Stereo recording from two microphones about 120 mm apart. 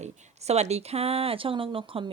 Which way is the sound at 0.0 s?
65° right (ahead or behind).